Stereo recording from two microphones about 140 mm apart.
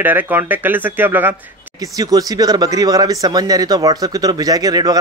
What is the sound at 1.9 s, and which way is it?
Speech, 25° right (ahead or behind).